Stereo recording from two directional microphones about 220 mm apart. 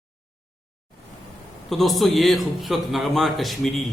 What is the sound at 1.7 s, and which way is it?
A man's voice, centre (ahead or behind).